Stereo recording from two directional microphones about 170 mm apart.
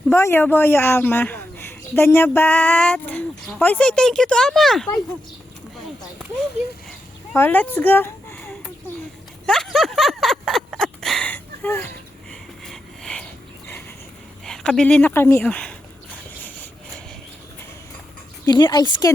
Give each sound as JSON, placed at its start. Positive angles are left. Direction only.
{"t": 0.1, "sound": "speech", "side_deg": 15}
{"t": 7.3, "sound": "speech", "side_deg": 10}
{"t": 9.5, "sound": "a sound", "side_deg": 0}
{"t": 14.4, "sound": "speech", "side_deg": 5}
{"t": 18.4, "sound": "speech", "side_deg": 25}